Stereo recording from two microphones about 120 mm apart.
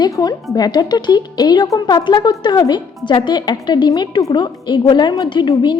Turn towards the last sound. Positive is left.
turn(degrees=35)  # may be behind; listen again after turning